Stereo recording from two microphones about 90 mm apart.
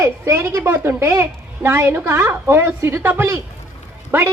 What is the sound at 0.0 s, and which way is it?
A woman's voice, 30° right (ahead or behind).